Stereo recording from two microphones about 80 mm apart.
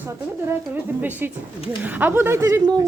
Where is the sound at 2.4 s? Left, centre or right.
Right.